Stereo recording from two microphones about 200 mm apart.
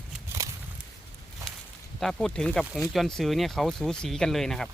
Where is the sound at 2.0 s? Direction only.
5° left (ahead or behind).